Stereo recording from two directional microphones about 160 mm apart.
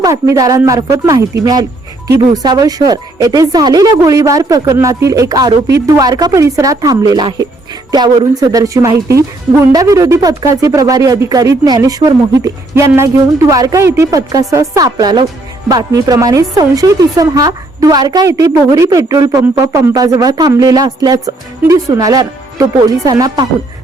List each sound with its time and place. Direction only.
0.0 s speech: 20° right (ahead or behind)